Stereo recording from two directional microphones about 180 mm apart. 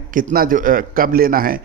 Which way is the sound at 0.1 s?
50° right (ahead or behind).